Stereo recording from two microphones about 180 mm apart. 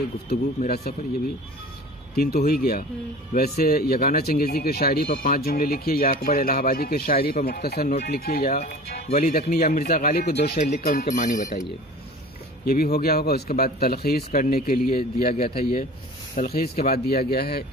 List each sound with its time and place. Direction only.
0.7 s speech: 60° left (ahead or behind)
2.1 s speech: 60° left (ahead or behind); by 11.6 s 45° left (ahead or behind)
12.6 s speech: 55° left (ahead or behind)
15.3 s speech: 35° left (ahead or behind)
16.3 s speech: 60° left (ahead or behind)